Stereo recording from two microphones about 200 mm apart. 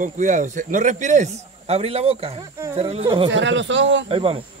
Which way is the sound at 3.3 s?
65° right (ahead or behind).